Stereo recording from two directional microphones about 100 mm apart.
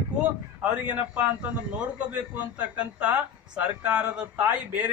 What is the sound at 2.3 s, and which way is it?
A man's voice, 15° right (ahead or behind).